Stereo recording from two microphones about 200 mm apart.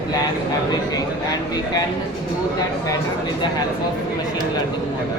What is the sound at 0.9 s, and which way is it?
Speech, 20° left (ahead or behind).